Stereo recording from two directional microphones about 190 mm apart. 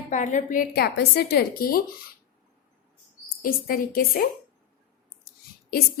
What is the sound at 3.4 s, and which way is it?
Speech, 50° left (ahead or behind).